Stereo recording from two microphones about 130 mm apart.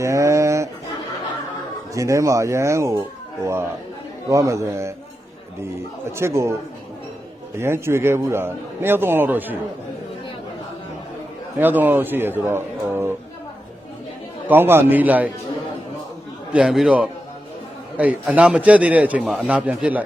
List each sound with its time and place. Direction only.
0.0 s bird: 20° right (ahead or behind)
1.9 s speech: 25° right (ahead or behind)
4.3 s speech: 25° right (ahead or behind)
6.1 s speech: 20° right (ahead or behind)
7.5 s a man's voice: 20° right (ahead or behind)
11.5 s a man's voice: 15° right (ahead or behind)
14.4 s a man's voice: 15° right (ahead or behind)
16.5 s a man's voice: 5° right (ahead or behind)